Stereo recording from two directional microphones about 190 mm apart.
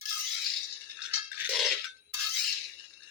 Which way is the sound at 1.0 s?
5° right (ahead or behind).